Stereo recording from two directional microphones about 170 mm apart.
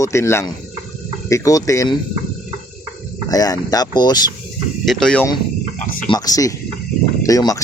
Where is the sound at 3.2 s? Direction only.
20° left (ahead or behind).